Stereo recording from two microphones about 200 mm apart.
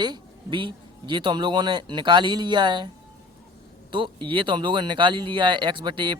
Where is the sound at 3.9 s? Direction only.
25° right (ahead or behind).